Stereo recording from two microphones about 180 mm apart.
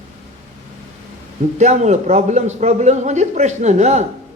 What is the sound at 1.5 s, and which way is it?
A man's voice, 40° right (ahead or behind).